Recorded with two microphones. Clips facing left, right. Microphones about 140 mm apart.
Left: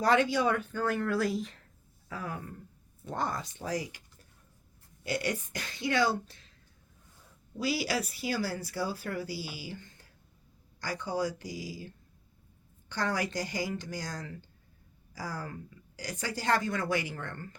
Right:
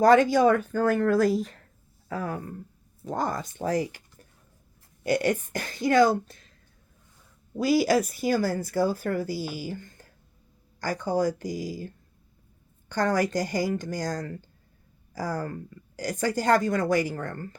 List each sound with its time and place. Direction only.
0.0 s speech: 45° right (ahead or behind)
7.5 s speech: 45° right (ahead or behind)